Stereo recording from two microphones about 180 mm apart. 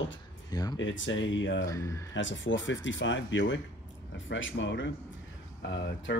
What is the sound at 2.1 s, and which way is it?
Speech, 90° left.